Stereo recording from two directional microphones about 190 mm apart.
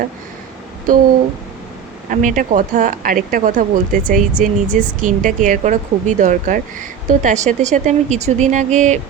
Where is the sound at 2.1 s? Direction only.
45° right (ahead or behind).